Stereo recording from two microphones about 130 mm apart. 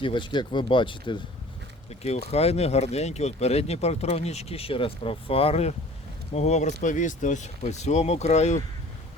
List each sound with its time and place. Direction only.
0.0 s speech: 40° left (ahead or behind)
1.9 s speech: 55° left (ahead or behind)